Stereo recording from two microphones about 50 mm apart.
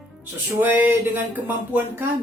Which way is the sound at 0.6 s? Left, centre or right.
Right.